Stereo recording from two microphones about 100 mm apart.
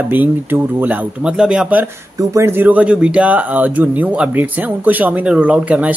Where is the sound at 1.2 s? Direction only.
5° right (ahead or behind).